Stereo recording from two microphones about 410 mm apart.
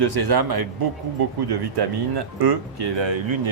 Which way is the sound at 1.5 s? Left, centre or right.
Right.